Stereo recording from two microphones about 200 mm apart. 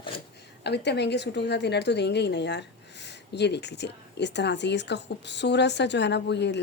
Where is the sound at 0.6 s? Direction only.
60° left (ahead or behind).